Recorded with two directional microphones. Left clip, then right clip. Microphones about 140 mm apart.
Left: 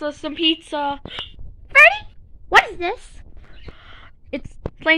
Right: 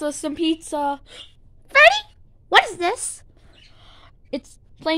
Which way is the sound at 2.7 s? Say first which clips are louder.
Right 2 dB; 45° right (ahead or behind).